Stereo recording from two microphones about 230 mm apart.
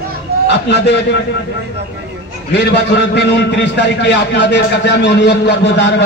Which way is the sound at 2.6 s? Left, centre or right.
Left.